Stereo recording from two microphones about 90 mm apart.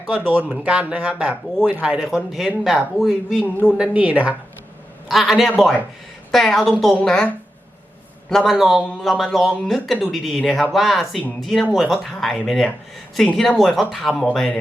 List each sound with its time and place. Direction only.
0.1 s a man's voice: 15° right (ahead or behind); by 3.4 s centre (ahead or behind)
3.8 s speech: 15° right (ahead or behind)
5.0 s a man's voice: centre (ahead or behind)
8.3 s a man's voice: centre (ahead or behind)